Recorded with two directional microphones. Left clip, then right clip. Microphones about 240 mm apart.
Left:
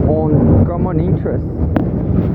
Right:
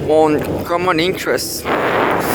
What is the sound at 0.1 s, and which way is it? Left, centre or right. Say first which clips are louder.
Speech: right 5 dB; right.